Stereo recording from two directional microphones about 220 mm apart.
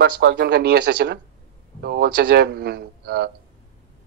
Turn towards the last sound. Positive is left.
turn(degrees=-45)  # may be behind; listen again after turning